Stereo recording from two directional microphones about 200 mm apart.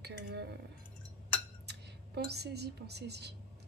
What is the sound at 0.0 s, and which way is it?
Chink, 55° right (ahead or behind).